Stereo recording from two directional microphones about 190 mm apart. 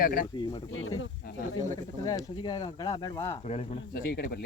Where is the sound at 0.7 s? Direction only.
90° left.